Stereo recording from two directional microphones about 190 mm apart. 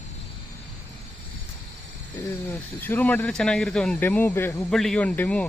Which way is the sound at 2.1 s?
15° left (ahead or behind).